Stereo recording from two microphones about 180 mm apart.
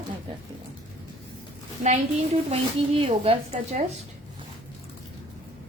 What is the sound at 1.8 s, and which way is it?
A woman's voice, 35° right (ahead or behind).